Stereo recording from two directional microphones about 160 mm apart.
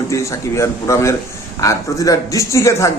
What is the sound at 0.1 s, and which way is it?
A man's voice, 20° left (ahead or behind).